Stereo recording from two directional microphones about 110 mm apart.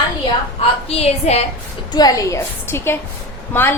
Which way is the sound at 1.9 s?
35° left (ahead or behind).